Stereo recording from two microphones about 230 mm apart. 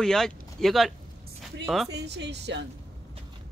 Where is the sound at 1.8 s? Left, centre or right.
Right.